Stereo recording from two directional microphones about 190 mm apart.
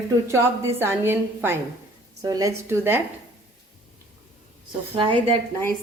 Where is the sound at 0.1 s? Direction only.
15° right (ahead or behind).